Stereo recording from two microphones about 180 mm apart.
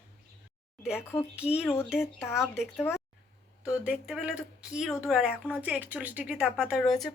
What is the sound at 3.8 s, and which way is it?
Speech, 5° right (ahead or behind).